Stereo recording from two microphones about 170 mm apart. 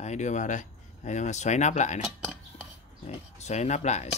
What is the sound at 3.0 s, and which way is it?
Speech, 40° left (ahead or behind).